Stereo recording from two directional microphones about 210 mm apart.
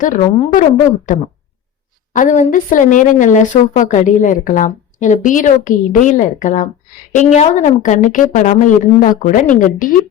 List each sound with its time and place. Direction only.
0.0 s speech: 40° left (ahead or behind)
2.1 s speech: 35° left (ahead or behind)